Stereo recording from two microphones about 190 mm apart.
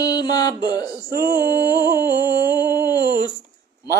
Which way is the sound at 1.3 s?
20° left (ahead or behind).